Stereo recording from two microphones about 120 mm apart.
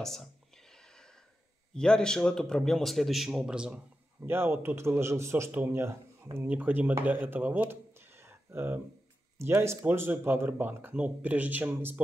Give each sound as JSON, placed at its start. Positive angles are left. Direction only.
{"t": 0.0, "sound": "a sound", "side_deg": 5}
{"t": 1.7, "sound": "a man's voice", "side_deg": 5}
{"t": 4.3, "sound": "speech", "side_deg": -20}